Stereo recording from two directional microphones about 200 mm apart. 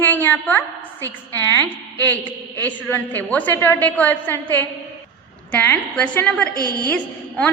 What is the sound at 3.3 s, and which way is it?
A woman's voice, 5° left (ahead or behind).